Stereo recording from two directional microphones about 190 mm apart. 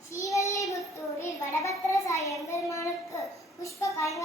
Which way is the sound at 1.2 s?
15° left (ahead or behind).